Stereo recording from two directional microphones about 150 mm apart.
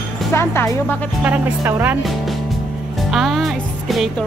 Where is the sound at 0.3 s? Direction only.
15° left (ahead or behind).